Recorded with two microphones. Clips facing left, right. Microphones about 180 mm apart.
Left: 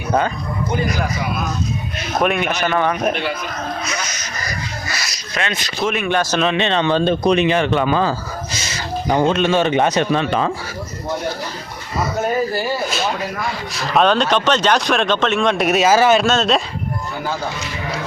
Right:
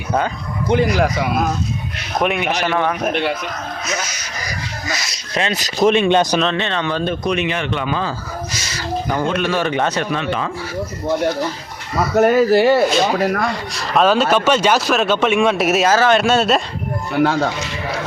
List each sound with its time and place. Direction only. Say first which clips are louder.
0.7 s speech: right 7 dB; 90° right
2.2 s speech: even; 15° right (ahead or behind)
2.6 s speech: left 3 dB; centre (ahead or behind)
4.0 s dog: left 1 dB; 10° right (ahead or behind); by 5.9 s 40° right (ahead or behind)
5.9 s speech: right 3 dB; 25° right (ahead or behind)
6.4 s speech: left 2 dB; 15° left (ahead or behind); by 8.1 s 40° left (ahead or behind)
9.2 s a man's voice: left 4 dB; 25° left (ahead or behind)
10.1 s speech: left 3 dB; 35° left (ahead or behind)
12.1 s speech: right 9 dB; 75° right (ahead or behind)
13.5 s speech: even; centre (ahead or behind)
15.9 s speech: left 2 dB; 10° left (ahead or behind)
16.2 s speech: right 1 dB; 10° right (ahead or behind)
17.2 s speech: right 6 dB; 75° right (ahead or behind)